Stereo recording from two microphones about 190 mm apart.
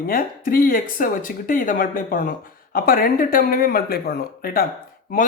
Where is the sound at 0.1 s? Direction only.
50° left (ahead or behind).